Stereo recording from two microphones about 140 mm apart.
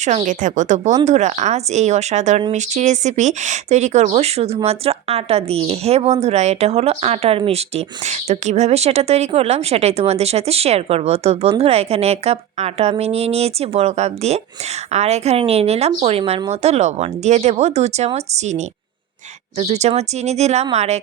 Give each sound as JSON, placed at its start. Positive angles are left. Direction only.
{"t": 0.3, "sound": "a woman's voice", "side_deg": -65}